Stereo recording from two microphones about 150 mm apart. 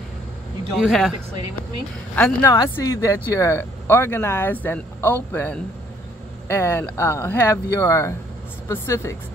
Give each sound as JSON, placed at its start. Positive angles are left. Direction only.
{"t": 0.7, "sound": "speech", "side_deg": 0}
{"t": 2.1, "sound": "speech", "side_deg": 10}